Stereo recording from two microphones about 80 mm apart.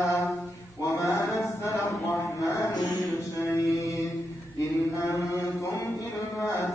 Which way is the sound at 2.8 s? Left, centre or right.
Left.